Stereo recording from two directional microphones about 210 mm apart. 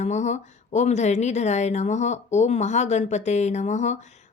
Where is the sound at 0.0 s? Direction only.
35° left (ahead or behind).